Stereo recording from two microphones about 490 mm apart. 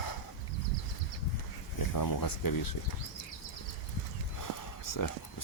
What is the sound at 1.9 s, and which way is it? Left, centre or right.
Speech, left.